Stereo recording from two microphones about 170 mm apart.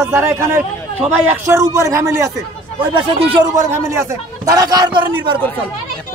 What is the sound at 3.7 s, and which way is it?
A man's voice, 15° right (ahead or behind).